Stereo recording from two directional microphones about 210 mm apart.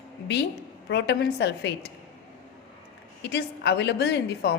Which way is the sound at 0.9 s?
55° left (ahead or behind).